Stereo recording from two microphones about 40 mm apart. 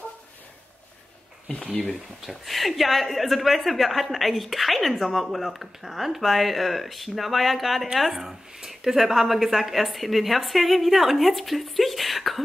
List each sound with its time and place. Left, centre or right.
1.5 s speech: left
2.2 s a woman's voice: centre